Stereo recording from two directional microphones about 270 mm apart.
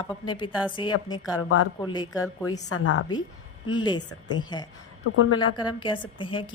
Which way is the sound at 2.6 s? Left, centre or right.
Left.